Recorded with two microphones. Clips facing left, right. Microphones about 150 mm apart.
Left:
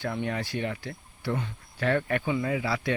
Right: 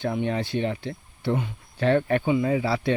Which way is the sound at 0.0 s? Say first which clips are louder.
Right 5 dB; 20° right (ahead or behind).